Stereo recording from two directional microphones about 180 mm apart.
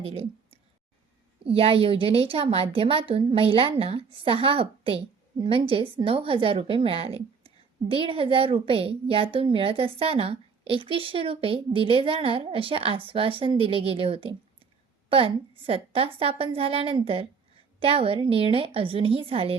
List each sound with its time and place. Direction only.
0.0 s a woman's voice: 35° right (ahead or behind)